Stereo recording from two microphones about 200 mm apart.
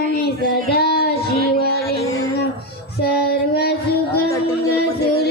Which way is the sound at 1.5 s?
55° left (ahead or behind).